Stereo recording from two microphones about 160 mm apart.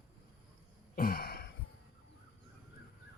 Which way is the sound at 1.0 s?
65° left (ahead or behind).